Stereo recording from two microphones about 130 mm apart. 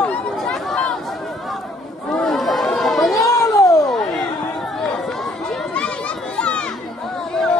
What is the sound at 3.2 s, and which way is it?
Cat, 25° left (ahead or behind).